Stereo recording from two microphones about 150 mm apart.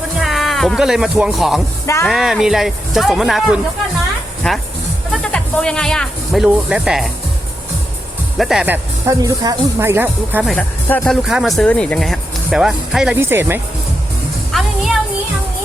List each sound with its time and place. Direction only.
0.2 s speech: centre (ahead or behind)
8.4 s speech: 5° right (ahead or behind)
9.2 s speech: 25° right (ahead or behind)
10.4 s speech: centre (ahead or behind)
13.1 s speech: 15° right (ahead or behind)
14.5 s music: centre (ahead or behind)